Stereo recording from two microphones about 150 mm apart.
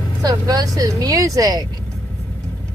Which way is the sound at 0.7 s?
25° right (ahead or behind).